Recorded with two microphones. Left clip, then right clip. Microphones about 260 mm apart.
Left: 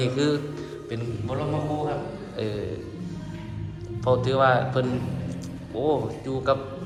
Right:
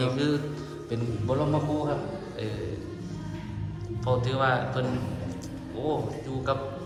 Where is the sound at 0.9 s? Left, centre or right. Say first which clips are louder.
Right 3 dB; right.